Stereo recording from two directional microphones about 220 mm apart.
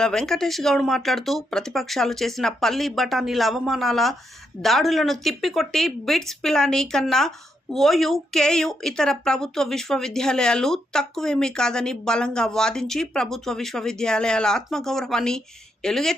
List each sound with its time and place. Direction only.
0.0 s speech: centre (ahead or behind)